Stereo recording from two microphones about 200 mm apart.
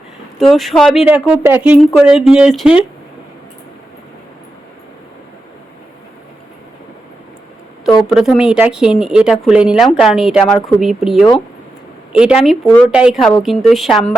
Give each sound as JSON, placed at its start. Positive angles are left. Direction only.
{"t": 0.3, "sound": "speech", "side_deg": 0}
{"t": 8.0, "sound": "speech", "side_deg": 0}